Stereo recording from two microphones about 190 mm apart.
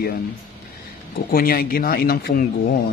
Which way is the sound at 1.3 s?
50° left (ahead or behind).